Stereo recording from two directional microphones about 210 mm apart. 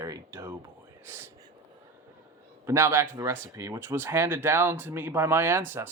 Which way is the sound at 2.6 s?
10° right (ahead or behind).